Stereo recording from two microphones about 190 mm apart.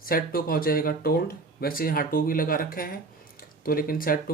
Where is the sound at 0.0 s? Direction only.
50° left (ahead or behind).